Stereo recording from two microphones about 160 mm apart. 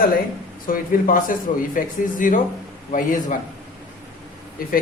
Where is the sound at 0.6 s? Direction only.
60° left (ahead or behind).